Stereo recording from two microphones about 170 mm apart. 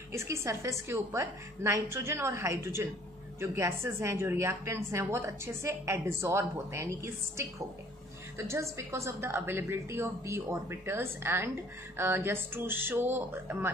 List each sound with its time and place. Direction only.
0.1 s a woman's voice: 15° right (ahead or behind)